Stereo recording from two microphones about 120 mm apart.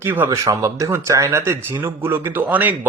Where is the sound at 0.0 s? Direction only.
15° right (ahead or behind).